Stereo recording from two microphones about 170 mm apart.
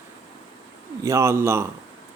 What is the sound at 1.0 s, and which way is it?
Speech, 15° right (ahead or behind).